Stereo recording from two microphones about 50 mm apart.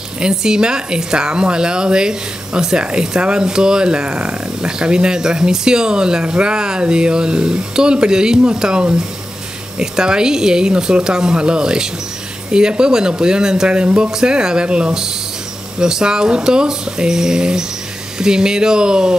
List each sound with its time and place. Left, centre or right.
0.2 s a woman's voice: centre